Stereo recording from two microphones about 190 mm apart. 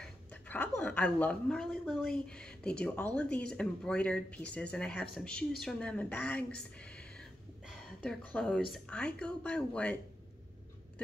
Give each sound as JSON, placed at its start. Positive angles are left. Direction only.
{"t": 0.3, "sound": "a woman's voice", "side_deg": 10}